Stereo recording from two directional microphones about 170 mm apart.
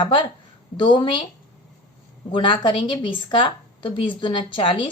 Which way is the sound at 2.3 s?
30° left (ahead or behind).